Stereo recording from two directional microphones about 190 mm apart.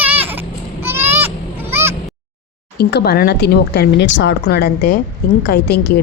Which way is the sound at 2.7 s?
55° left (ahead or behind).